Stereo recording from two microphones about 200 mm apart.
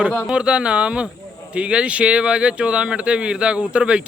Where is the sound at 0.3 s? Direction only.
5° right (ahead or behind).